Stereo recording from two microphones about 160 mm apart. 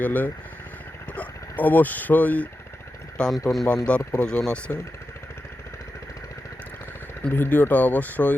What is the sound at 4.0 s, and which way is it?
Speech, 20° left (ahead or behind).